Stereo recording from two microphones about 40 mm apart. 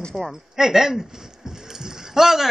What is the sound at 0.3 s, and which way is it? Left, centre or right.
Speech, centre.